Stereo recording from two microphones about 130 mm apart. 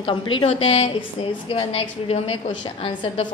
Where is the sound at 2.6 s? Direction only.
35° left (ahead or behind).